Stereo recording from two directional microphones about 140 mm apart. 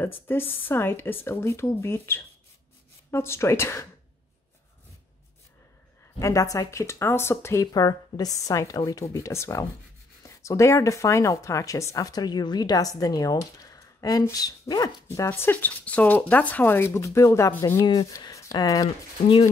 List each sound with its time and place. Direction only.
0.0 s speech: 15° left (ahead or behind)
6.1 s speech: 20° left (ahead or behind)
17.8 s speech: 30° left (ahead or behind)